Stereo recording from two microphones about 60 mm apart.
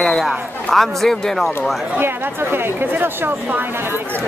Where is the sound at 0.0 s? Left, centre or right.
Centre.